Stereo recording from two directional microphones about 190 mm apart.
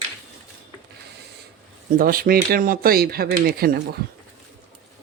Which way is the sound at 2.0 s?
50° right (ahead or behind).